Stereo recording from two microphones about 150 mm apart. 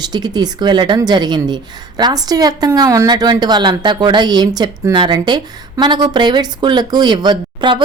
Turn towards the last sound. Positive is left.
turn(degrees=-30)  # may be behind; listen again after turning